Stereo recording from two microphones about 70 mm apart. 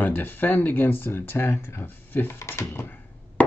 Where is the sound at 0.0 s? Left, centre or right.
Left.